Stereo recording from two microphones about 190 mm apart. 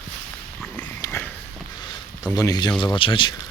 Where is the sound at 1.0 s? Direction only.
10° left (ahead or behind).